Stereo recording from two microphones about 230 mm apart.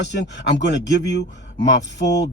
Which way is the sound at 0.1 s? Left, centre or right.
Left.